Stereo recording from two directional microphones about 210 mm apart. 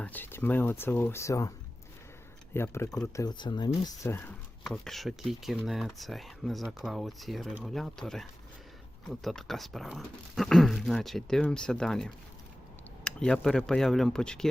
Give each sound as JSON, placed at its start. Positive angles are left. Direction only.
{"t": 0.0, "sound": "speech", "side_deg": 10}
{"t": 4.0, "sound": "speech", "side_deg": 10}